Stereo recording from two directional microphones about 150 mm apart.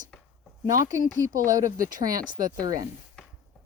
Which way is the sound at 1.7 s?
65° right (ahead or behind).